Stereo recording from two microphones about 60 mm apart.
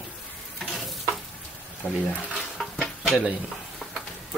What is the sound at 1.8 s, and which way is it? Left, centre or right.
Speech, left.